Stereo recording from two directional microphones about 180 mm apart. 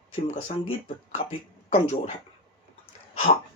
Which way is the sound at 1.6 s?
40° left (ahead or behind).